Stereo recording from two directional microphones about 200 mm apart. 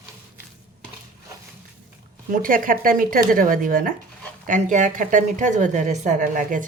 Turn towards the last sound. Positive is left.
turn(degrees=-40)  # may be behind; listen again after turning